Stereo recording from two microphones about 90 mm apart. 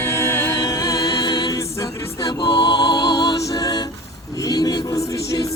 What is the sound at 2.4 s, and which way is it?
Music, 55° left (ahead or behind).